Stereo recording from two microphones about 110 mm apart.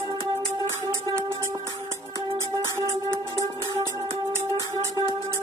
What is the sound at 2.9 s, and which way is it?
Music, 30° right (ahead or behind).